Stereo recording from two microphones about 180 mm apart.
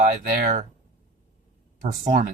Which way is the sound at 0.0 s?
45° right (ahead or behind).